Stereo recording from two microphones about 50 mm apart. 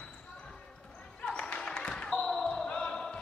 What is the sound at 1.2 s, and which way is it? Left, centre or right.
Basketball bounce, left.